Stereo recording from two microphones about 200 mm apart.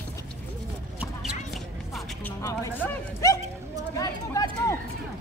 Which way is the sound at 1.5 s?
5° left (ahead or behind).